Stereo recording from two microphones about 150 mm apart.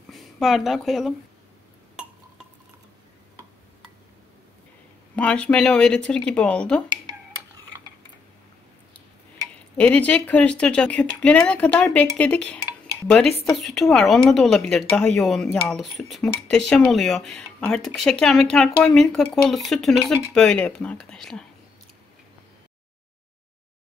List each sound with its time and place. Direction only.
0.1 s a woman's voice: centre (ahead or behind)
5.1 s speech: 10° left (ahead or behind)
7.1 s a sound: 25° right (ahead or behind)
9.8 s speech: 10° left (ahead or behind)